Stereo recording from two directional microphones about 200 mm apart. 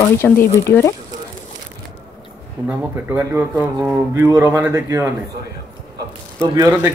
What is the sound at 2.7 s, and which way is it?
Speech, 10° right (ahead or behind).